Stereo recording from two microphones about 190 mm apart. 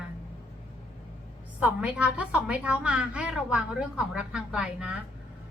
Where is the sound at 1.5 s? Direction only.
5° right (ahead or behind).